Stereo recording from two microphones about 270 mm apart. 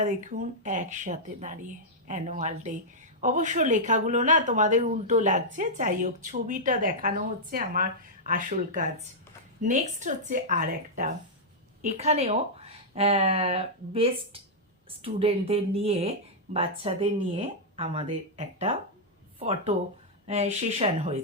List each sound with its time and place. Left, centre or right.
0.0 s speech: right